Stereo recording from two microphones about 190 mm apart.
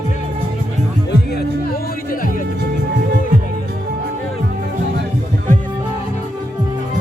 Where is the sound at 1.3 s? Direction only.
55° left (ahead or behind).